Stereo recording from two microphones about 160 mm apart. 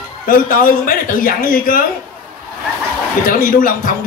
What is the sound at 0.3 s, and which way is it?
Speech, 60° left (ahead or behind).